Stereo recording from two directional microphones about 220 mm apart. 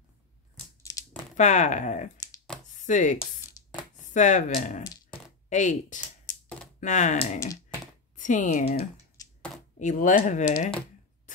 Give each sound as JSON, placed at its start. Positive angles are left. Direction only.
{"t": 1.3, "sound": "speech", "side_deg": 35}
{"t": 2.7, "sound": "chopping", "side_deg": 35}
{"t": 4.0, "sound": "speech", "side_deg": 35}
{"t": 9.2, "sound": "a sound", "side_deg": 15}
{"t": 9.8, "sound": "speech", "side_deg": 35}